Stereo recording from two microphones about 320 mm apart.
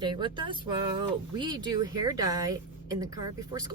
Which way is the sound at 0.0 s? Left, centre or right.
Centre.